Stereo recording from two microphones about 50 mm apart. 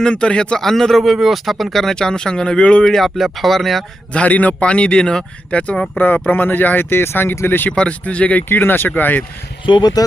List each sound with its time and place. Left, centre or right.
0.0 s speech: centre
0.6 s speech: centre
2.8 s speech: centre
4.1 s speech: left
5.7 s speech: centre
6.0 s speech: left
6.9 s speech: left
7.8 s speech: left